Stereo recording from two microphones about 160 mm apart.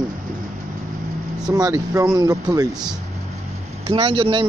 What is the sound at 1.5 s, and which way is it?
Speech, 25° right (ahead or behind).